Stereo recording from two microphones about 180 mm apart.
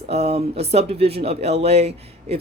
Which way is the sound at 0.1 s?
35° right (ahead or behind).